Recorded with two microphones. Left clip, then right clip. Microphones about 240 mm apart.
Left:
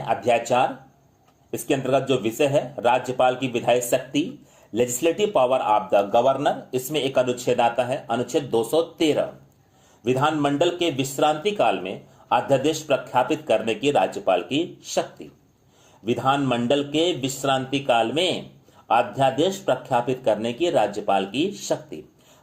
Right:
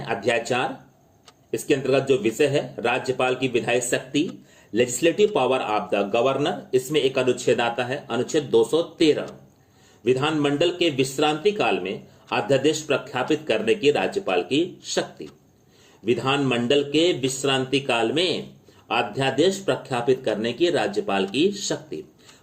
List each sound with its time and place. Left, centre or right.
0.0 s speech: left
16.0 s speech: left